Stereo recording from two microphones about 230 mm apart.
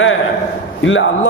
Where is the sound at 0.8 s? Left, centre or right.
Left.